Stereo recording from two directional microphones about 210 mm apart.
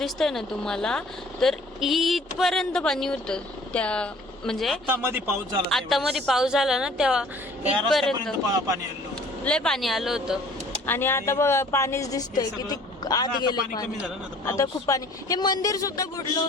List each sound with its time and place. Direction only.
0.0 s a woman's voice: centre (ahead or behind)
4.9 s a man's voice: 10° right (ahead or behind)
5.6 s a woman's voice: centre (ahead or behind)
8.5 s a man's voice: 15° right (ahead or behind)
9.4 s a woman's voice: 5° left (ahead or behind)
10.8 s speech: 10° left (ahead or behind)